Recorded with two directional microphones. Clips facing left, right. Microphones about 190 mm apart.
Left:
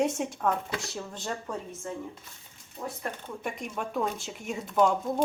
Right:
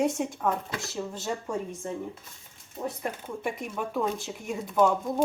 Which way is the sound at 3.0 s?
10° right (ahead or behind).